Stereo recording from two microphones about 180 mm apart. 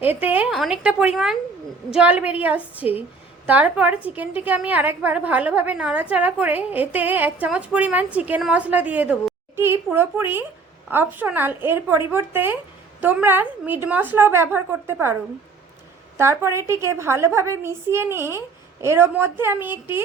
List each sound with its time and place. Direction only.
0.0 s a woman's voice: 10° right (ahead or behind)
16.1 s a woman's voice: 15° right (ahead or behind)